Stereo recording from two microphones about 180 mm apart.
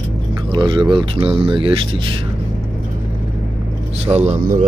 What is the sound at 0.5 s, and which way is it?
Speech, 25° right (ahead or behind).